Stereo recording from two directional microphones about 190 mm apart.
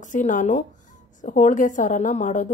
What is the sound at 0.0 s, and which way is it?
A woman's voice, 40° left (ahead or behind).